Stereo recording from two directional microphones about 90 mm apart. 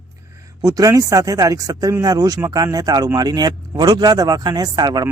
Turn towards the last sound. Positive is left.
turn(degrees=-50)  # may be behind; listen again after turning